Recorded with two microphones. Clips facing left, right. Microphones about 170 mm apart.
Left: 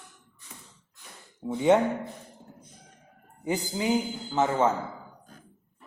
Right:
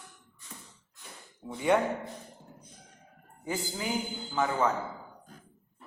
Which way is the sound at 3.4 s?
20° left (ahead or behind).